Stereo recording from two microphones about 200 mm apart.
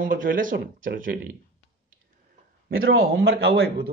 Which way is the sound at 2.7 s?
85° right.